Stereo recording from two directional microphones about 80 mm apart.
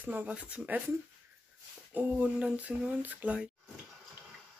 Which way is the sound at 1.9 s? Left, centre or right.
Centre.